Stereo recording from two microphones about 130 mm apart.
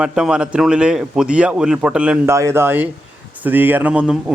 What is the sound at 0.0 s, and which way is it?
A man's voice, 5° right (ahead or behind).